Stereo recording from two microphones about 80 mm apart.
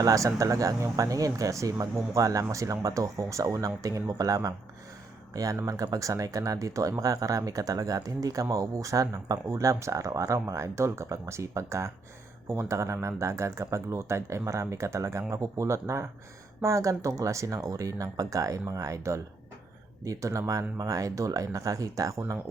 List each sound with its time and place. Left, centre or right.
0.0 s speech: right